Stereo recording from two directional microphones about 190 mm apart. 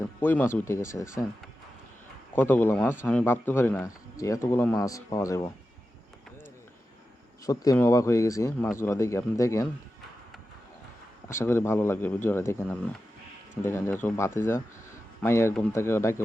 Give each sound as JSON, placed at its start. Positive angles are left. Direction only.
{"t": 0.2, "sound": "speech", "side_deg": 10}
{"t": 2.3, "sound": "speech", "side_deg": 10}
{"t": 7.4, "sound": "speech", "side_deg": 20}
{"t": 11.3, "sound": "speech", "side_deg": 15}